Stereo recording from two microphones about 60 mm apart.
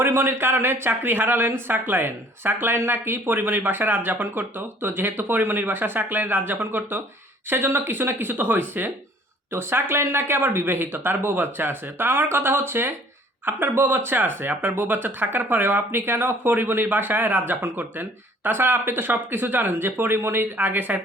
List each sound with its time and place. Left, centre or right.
0.0 s speech: right